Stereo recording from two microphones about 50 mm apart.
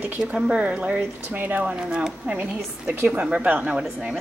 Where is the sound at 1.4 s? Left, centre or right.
Right.